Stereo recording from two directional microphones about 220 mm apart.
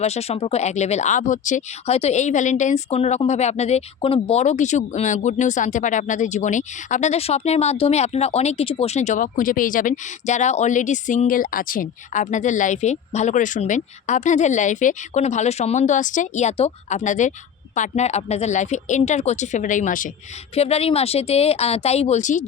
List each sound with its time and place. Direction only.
0.0 s speech: 30° left (ahead or behind)